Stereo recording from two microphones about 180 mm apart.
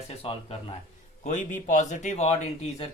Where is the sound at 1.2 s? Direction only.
45° left (ahead or behind).